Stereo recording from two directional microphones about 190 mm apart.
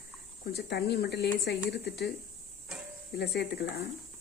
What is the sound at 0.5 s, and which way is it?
Speech, 60° left (ahead or behind).